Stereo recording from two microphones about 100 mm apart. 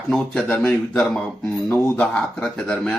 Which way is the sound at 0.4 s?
15° left (ahead or behind).